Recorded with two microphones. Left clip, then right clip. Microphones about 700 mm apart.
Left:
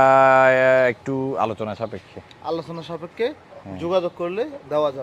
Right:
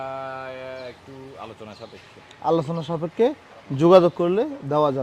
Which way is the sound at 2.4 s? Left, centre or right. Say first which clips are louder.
Right 5 dB; right.